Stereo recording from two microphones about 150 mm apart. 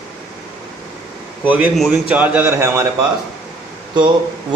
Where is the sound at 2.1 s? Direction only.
10° right (ahead or behind).